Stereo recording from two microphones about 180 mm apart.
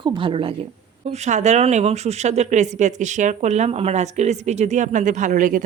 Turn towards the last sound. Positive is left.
turn(degrees=-45)  # may be behind; listen again after turning